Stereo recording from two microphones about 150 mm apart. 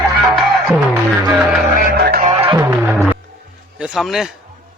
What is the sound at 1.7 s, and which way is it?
Music, 90° right.